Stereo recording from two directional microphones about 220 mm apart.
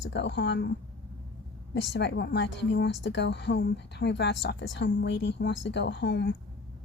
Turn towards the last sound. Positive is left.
turn(degrees=50)  # may be behind; listen again after turning